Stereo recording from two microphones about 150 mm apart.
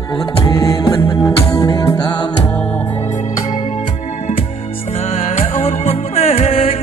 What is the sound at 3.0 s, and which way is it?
Music, 55° left (ahead or behind).